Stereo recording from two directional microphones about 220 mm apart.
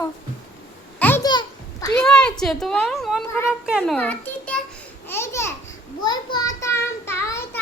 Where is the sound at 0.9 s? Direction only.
10° left (ahead or behind).